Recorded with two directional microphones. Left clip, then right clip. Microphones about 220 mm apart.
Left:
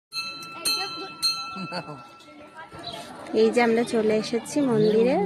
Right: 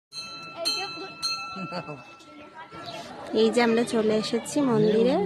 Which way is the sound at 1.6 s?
Centre (ahead or behind).